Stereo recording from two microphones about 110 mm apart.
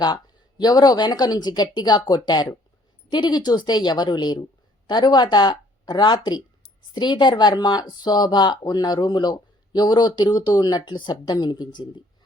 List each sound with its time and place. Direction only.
0.6 s speech: 35° left (ahead or behind)